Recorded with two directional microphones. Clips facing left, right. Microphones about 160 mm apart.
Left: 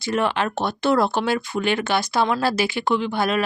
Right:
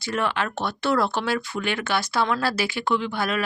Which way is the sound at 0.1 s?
20° left (ahead or behind).